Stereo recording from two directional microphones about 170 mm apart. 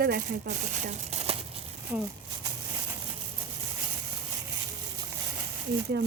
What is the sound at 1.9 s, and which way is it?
Speech, 15° right (ahead or behind).